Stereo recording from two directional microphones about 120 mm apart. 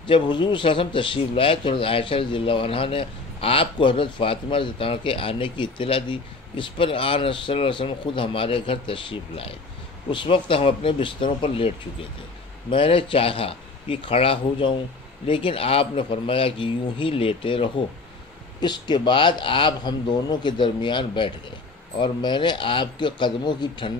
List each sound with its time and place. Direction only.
0.0 s a man's voice: 40° left (ahead or behind)